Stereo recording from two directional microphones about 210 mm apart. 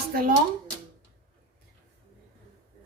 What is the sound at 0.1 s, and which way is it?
Speech, 45° right (ahead or behind).